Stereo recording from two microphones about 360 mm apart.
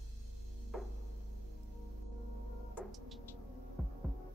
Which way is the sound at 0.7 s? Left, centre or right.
Centre.